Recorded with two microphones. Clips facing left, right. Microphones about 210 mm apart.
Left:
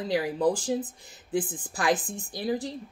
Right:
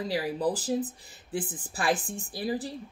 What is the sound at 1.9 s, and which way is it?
Speech, 35° left (ahead or behind).